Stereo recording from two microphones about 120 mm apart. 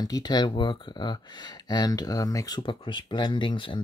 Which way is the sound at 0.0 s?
35° left (ahead or behind).